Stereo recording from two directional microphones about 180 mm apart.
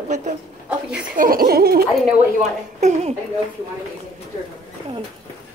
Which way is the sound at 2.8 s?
40° right (ahead or behind).